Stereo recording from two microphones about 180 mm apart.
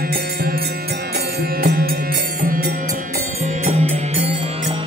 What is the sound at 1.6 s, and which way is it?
Music, 55° right (ahead or behind).